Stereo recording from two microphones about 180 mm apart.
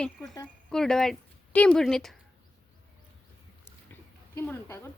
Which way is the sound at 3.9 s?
10° left (ahead or behind).